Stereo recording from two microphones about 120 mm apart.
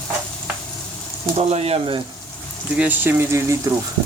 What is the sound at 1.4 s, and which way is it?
Speech, 60° right (ahead or behind).